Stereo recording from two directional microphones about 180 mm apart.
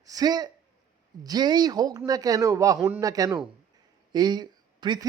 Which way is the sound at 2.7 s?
5° right (ahead or behind).